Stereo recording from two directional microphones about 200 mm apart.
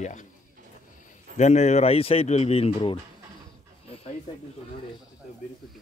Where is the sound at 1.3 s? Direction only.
35° left (ahead or behind).